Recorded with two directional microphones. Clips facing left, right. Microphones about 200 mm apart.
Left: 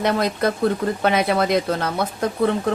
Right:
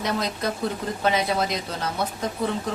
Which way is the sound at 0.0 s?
60° left (ahead or behind).